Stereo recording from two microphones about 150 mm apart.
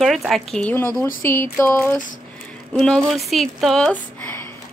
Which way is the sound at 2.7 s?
Centre (ahead or behind).